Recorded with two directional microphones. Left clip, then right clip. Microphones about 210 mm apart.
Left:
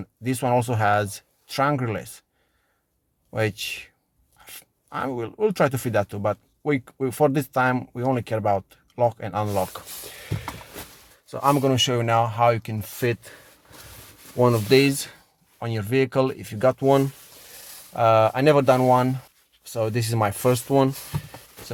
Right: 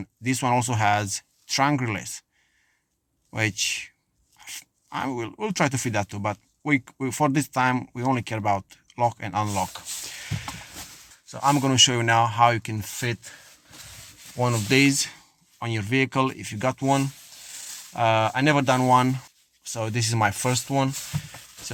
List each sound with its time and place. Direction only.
0.0 s speech: 5° left (ahead or behind)
3.3 s speech: 5° left (ahead or behind)
13.0 s speech: 20° left (ahead or behind)
14.3 s speech: 15° left (ahead or behind)
20.7 s speech: 15° left (ahead or behind)